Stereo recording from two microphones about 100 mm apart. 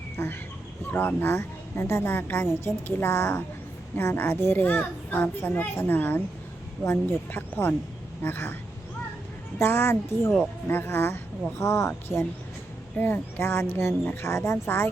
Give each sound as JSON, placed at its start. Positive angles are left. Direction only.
{"t": 0.2, "sound": "a child's voice", "side_deg": 25}
{"t": 9.6, "sound": "a child's voice", "side_deg": 20}